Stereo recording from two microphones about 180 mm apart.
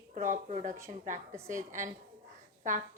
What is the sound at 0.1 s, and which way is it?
Speech, 45° right (ahead or behind).